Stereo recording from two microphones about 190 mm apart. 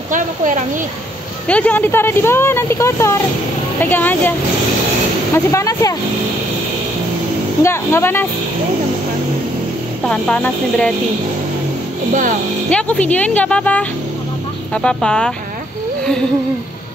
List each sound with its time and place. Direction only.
0.1 s speech: 45° right (ahead or behind)
1.5 s speech: 10° left (ahead or behind)
5.3 s speech: 15° left (ahead or behind)
7.6 s speech: 15° left (ahead or behind)
10.0 s speech: 5° left (ahead or behind)
12.1 s speech: 45° right (ahead or behind)
12.6 s speech: 5° left (ahead or behind)